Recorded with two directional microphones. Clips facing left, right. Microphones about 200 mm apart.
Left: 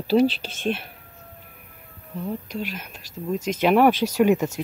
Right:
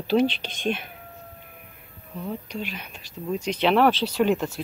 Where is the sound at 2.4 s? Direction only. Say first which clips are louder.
Left 2 dB; 40° left (ahead or behind).